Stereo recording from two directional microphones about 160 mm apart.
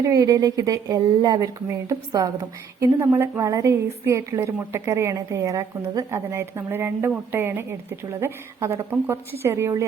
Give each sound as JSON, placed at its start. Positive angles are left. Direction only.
{"t": 0.0, "sound": "speech", "side_deg": -20}